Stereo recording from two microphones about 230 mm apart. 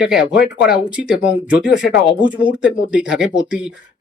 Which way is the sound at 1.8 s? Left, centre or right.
Left.